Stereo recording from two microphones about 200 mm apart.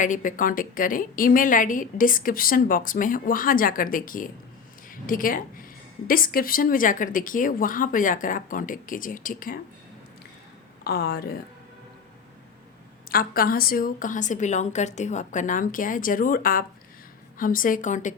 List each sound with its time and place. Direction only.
0.0 s a woman's voice: 40° left (ahead or behind)
10.8 s a woman's voice: 50° left (ahead or behind)
13.1 s a woman's voice: 45° left (ahead or behind)